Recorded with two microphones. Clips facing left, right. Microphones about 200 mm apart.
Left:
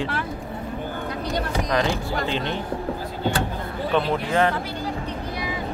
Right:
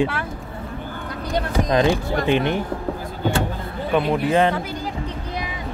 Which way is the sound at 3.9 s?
15° right (ahead or behind).